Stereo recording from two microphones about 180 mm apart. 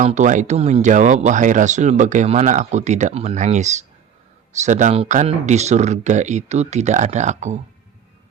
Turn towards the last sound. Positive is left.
turn(degrees=-40)  # may be behind; listen again after turning